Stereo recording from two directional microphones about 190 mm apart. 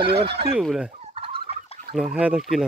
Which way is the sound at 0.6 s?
5° right (ahead or behind).